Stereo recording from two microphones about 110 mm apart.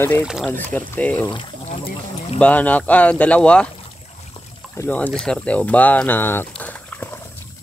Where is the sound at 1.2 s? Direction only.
50° left (ahead or behind).